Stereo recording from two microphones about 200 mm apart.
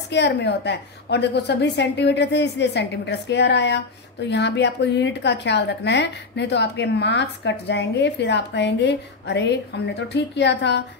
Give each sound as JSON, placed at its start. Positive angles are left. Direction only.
{"t": 0.1, "sound": "a woman's voice", "side_deg": 60}